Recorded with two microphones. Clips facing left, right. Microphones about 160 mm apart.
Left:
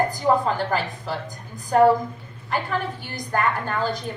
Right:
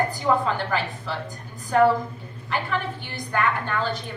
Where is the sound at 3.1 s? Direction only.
40° left (ahead or behind).